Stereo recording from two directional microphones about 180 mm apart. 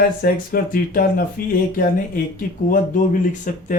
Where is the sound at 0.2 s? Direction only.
55° left (ahead or behind).